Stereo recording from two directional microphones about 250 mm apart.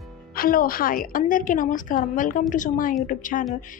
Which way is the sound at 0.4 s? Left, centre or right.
Left.